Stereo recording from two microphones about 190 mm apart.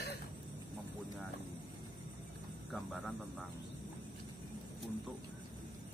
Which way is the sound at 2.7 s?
Centre (ahead or behind).